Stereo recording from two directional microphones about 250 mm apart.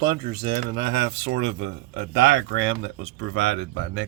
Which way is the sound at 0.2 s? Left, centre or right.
Right.